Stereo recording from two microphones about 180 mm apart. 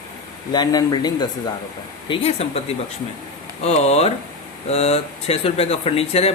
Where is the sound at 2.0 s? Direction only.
35° left (ahead or behind).